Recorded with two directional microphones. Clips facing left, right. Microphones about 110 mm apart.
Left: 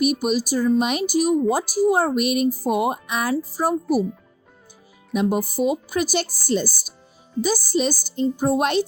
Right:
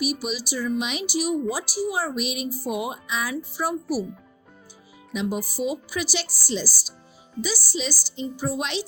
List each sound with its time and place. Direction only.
0.0 s speech: 50° left (ahead or behind)
3.5 s speech: 40° left (ahead or behind)
5.1 s speech: 50° left (ahead or behind)